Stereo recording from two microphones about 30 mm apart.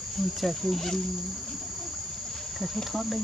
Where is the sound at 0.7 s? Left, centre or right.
Centre.